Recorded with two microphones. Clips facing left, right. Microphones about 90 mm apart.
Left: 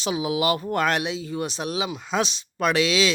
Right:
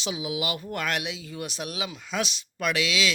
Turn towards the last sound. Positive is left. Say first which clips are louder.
# left 5 dB
turn(degrees=35)  # may be behind; listen again after turning